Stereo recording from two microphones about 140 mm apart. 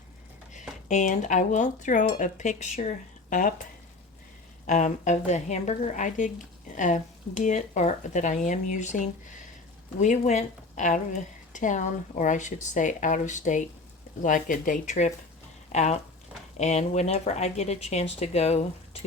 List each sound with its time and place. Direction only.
0.9 s a woman's voice: 60° left (ahead or behind)
4.6 s a woman's voice: 60° left (ahead or behind)